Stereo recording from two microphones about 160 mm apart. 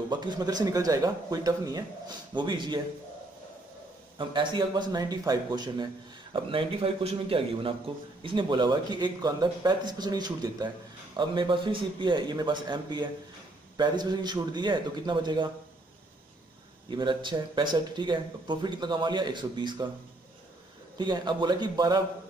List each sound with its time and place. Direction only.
0.1 s speech: 25° right (ahead or behind)
4.2 s speech: 30° right (ahead or behind)
16.9 s speech: 30° right (ahead or behind)
21.0 s speech: 30° right (ahead or behind)